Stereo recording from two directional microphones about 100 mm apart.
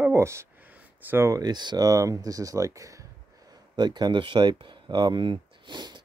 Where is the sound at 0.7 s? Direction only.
20° right (ahead or behind).